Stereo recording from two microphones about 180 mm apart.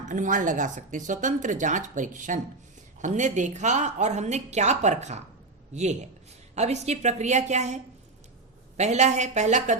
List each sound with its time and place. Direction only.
0.1 s a woman's voice: 45° right (ahead or behind)
8.8 s a woman's voice: 40° right (ahead or behind)